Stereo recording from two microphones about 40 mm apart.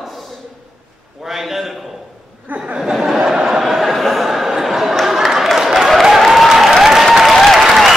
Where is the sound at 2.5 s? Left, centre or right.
Right.